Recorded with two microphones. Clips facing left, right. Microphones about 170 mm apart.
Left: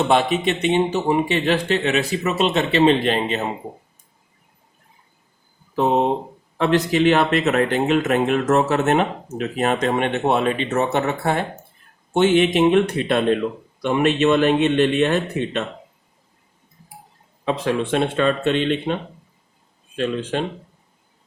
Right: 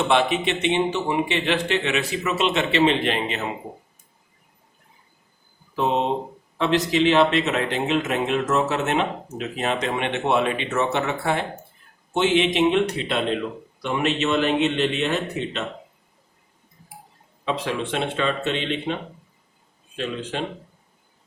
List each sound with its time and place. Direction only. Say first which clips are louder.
0.1 s a man's voice: left 2 dB; 40° left (ahead or behind)
5.7 s speech: left 4 dB; 50° left (ahead or behind)
17.4 s speech: left 4 dB; 50° left (ahead or behind)